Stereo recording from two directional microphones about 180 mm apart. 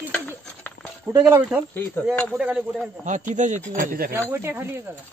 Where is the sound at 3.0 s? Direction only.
45° right (ahead or behind).